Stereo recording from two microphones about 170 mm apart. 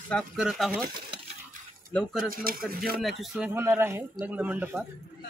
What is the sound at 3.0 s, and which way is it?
Speech, 5° right (ahead or behind).